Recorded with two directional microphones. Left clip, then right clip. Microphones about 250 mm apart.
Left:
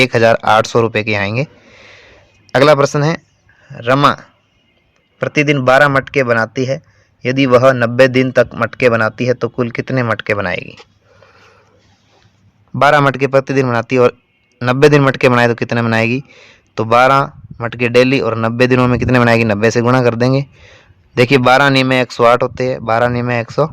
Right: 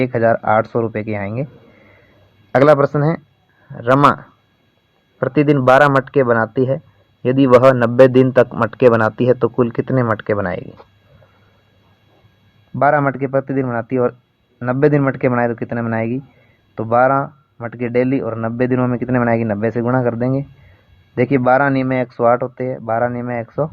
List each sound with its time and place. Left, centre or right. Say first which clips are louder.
0.0 s a man's voice: left 5 dB; left
2.5 s speech: left 2 dB; left
5.3 s speech: left 1 dB; left
5.5 s speech: left 1 dB; centre
7.3 s speech: left 1 dB; left
8.1 s speech: even; centre
9.9 s speech: left 2 dB; left
10.3 s speech: left 3 dB; centre
12.9 s a man's voice: left 7 dB; left